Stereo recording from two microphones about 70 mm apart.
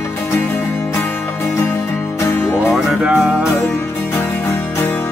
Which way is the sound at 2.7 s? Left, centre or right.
Centre.